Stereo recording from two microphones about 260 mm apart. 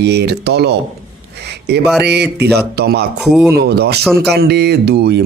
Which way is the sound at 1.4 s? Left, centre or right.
Right.